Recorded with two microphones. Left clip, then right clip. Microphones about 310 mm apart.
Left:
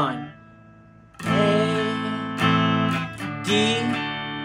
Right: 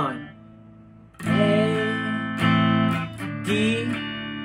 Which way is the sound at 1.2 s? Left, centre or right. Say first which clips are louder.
Left 1 dB; left.